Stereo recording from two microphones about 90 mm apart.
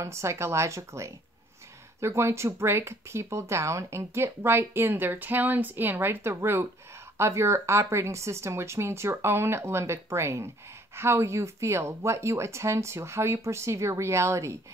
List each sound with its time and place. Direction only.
0.0 s speech: 30° right (ahead or behind)